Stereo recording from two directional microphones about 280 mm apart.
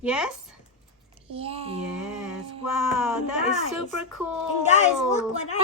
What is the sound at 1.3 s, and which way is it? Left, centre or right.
Speech, centre.